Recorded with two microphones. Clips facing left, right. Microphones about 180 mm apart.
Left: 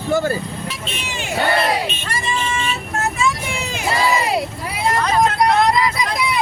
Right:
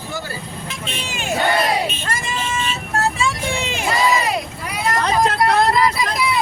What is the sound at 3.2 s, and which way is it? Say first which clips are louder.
Vehicle: even; 30° right (ahead or behind).